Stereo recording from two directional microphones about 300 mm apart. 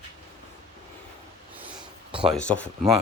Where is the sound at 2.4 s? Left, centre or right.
Centre.